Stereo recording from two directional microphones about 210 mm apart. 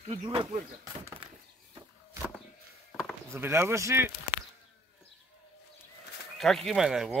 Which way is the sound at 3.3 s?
10° right (ahead or behind).